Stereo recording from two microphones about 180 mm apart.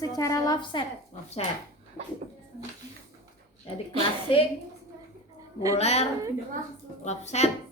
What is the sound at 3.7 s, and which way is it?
Speech, 30° left (ahead or behind).